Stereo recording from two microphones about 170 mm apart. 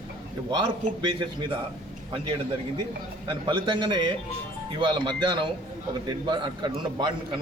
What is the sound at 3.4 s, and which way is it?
A man's voice, 30° right (ahead or behind).